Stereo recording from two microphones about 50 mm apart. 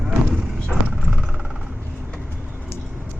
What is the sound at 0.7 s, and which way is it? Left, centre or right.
Vehicle, right.